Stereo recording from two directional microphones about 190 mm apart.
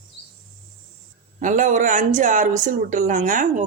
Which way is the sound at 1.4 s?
40° right (ahead or behind).